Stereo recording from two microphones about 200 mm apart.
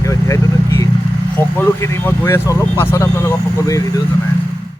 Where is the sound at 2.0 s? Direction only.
15° left (ahead or behind).